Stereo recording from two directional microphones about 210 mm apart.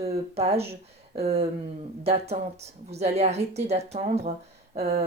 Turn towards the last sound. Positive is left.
turn(degrees=-30)  # may be behind; listen again after turning